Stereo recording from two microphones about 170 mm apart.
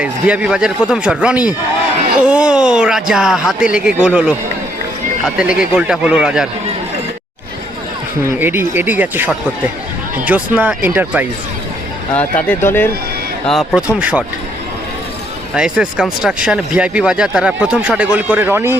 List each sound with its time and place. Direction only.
0.0 s speech: 5° right (ahead or behind)
8.4 s speech: 15° right (ahead or behind)
12.1 s speech: 10° left (ahead or behind)
13.5 s speech: centre (ahead or behind)
15.5 s speech: 5° right (ahead or behind)